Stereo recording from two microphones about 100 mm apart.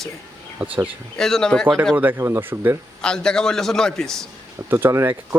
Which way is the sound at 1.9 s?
20° right (ahead or behind).